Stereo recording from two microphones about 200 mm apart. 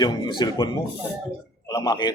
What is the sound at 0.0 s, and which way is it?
A man's voice, 20° left (ahead or behind).